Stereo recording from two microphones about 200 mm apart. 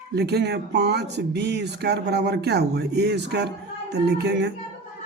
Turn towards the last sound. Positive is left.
turn(degrees=-55)  # may be behind; listen again after turning